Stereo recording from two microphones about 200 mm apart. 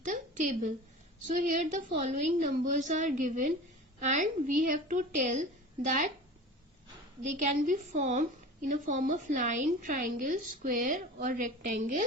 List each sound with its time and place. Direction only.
0.0 s a sound: 40° right (ahead or behind)
1.3 s a woman's voice: 40° right (ahead or behind)
7.3 s a woman's voice: 40° right (ahead or behind)